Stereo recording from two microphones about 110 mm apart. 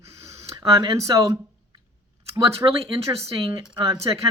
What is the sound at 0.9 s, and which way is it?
Speech, 30° right (ahead or behind).